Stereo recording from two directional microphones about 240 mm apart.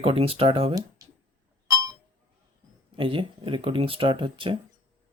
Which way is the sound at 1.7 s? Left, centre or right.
Centre.